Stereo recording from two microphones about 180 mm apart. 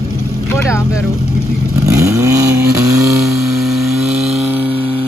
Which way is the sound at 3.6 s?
Centre (ahead or behind).